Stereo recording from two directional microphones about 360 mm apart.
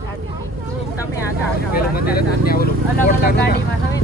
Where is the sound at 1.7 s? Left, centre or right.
Left.